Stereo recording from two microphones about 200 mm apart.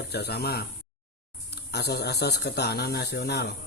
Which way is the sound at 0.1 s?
55° left (ahead or behind).